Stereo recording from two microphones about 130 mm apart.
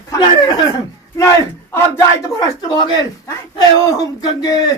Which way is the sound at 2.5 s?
30° left (ahead or behind).